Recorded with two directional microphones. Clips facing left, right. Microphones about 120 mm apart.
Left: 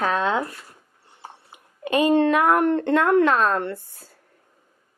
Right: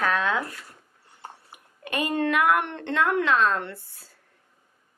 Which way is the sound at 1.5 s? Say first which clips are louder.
Left 10 dB; 25° left (ahead or behind).